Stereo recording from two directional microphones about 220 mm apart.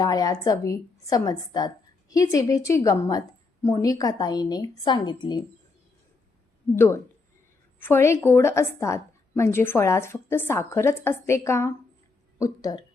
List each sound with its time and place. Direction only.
0.0 s a woman's voice: 15° left (ahead or behind)
6.7 s a woman's voice: 10° left (ahead or behind)